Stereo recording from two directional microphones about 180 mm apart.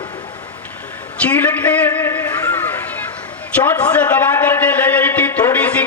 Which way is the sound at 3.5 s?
10° left (ahead or behind).